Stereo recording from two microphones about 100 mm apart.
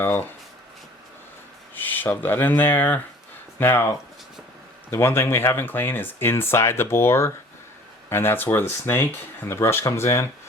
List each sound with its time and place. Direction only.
0.0 s speech: 20° left (ahead or behind)
1.7 s speech: 20° left (ahead or behind)
4.9 s speech: 25° left (ahead or behind)